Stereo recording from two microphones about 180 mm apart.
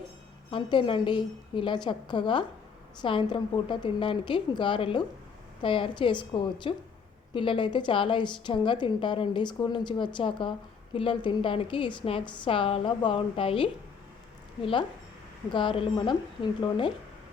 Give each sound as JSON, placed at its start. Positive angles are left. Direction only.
{"t": 0.5, "sound": "a woman's voice", "side_deg": 25}